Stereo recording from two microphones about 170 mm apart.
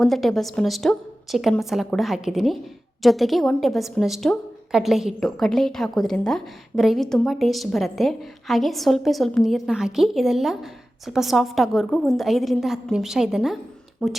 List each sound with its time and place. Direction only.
0.0 s a woman's voice: centre (ahead or behind)